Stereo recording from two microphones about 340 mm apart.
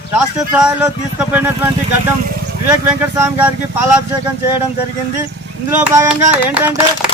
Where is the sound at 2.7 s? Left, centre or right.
Centre.